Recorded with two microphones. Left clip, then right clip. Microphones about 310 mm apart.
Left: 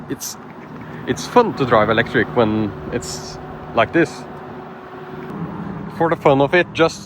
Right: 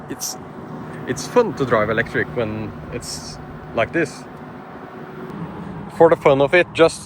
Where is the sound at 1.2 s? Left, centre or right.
Centre.